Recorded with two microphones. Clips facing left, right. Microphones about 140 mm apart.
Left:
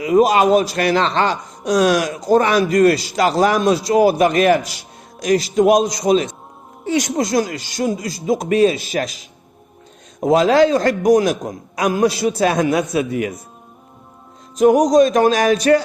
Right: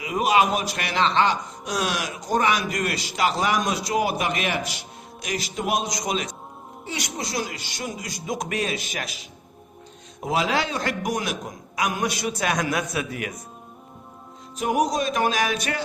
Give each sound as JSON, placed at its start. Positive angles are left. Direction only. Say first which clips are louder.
{"t": 0.0, "sound": "a man's voice", "louder": "left 8 dB", "side_deg": 40}
{"t": 6.9, "sound": "a man's voice", "louder": "left 12 dB", "side_deg": 45}
{"t": 10.2, "sound": "a man's voice", "louder": "left 11 dB", "side_deg": 40}
{"t": 14.6, "sound": "a man's voice", "louder": "left 11 dB", "side_deg": 40}